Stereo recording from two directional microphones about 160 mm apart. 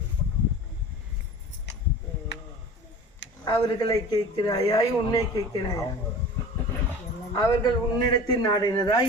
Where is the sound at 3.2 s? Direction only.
90° left.